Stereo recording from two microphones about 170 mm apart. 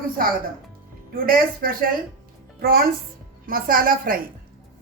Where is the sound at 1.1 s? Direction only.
55° right (ahead or behind).